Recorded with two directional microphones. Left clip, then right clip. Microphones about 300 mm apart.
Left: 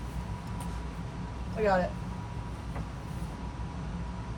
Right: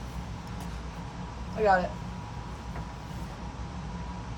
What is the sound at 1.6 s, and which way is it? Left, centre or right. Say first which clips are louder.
Speech: right 4 dB; centre.